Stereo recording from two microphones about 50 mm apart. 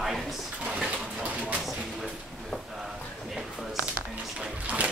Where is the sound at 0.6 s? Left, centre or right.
Centre.